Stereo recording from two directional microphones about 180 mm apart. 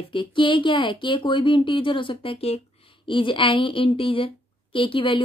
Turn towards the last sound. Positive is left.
turn(degrees=30)  # may be behind; listen again after turning